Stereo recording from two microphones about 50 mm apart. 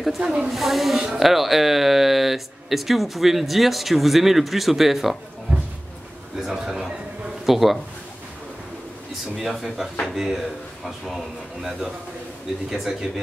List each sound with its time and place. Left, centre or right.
0.2 s speech: centre
0.5 s speech: centre
6.4 s speech: centre
9.4 s speech: centre